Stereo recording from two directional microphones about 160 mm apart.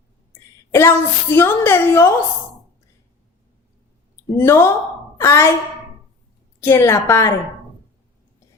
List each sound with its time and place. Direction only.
0.7 s a woman's voice: 15° left (ahead or behind)
4.4 s a woman's voice: 15° left (ahead or behind)
6.6 s a woman's voice: 15° left (ahead or behind)